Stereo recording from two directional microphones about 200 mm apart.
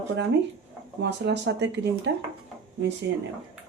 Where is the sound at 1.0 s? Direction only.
60° right (ahead or behind).